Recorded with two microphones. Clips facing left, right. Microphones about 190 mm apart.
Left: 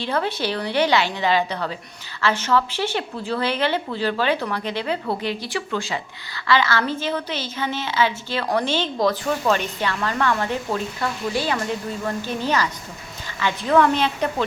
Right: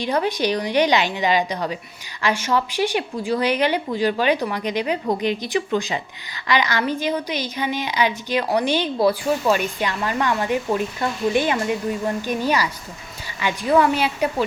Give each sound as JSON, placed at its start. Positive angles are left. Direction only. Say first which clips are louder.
{"t": 0.0, "sound": "speech", "louder": "right 3 dB", "side_deg": -15}